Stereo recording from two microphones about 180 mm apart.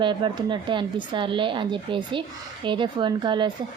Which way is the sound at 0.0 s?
25° right (ahead or behind).